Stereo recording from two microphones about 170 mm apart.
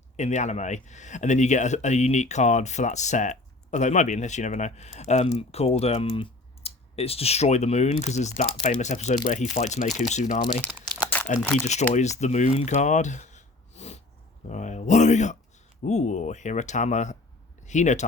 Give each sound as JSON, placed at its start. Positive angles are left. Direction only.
{"t": 0.2, "sound": "speech", "side_deg": 45}
{"t": 11.1, "sound": "a sound", "side_deg": 10}
{"t": 11.6, "sound": "speech", "side_deg": 45}